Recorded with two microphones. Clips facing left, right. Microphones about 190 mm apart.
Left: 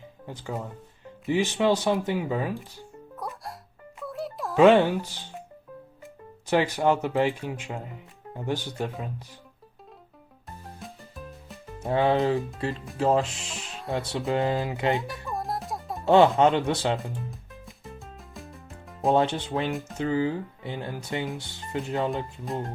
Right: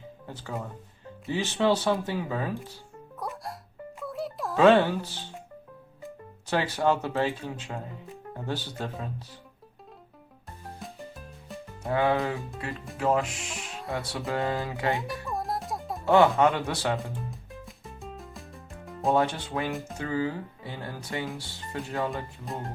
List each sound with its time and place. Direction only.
1.3 s speech: 15° left (ahead or behind)
3.2 s music: centre (ahead or behind)
4.5 s speech: 15° left (ahead or behind)
6.5 s speech: 15° left (ahead or behind)
11.8 s speech: 25° left (ahead or behind)
12.7 s speech: centre (ahead or behind)
13.0 s speech: 30° left (ahead or behind)
13.7 s music: centre (ahead or behind)
14.1 s speech: 20° left (ahead or behind)
14.9 s music: centre (ahead or behind)
16.0 s speech: 20° left (ahead or behind)
17.7 s music: centre (ahead or behind)
19.1 s speech: 25° left (ahead or behind)